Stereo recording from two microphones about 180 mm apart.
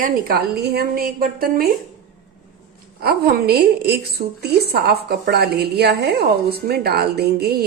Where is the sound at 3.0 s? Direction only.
60° right (ahead or behind).